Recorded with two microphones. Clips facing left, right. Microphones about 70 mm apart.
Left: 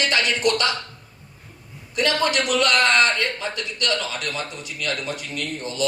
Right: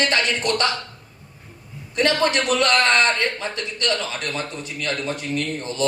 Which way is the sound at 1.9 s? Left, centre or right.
Right.